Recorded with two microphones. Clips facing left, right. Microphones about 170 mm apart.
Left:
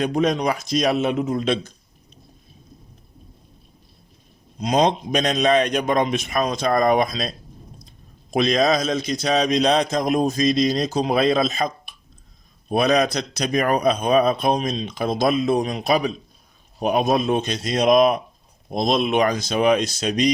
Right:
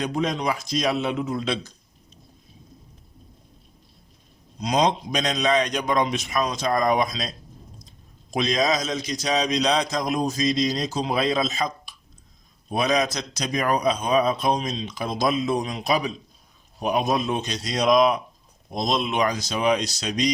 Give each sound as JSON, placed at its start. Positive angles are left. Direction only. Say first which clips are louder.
{"t": 0.0, "sound": "speech", "louder": "left 5 dB", "side_deg": 50}
{"t": 4.6, "sound": "a man's voice", "louder": "left 3 dB", "side_deg": 55}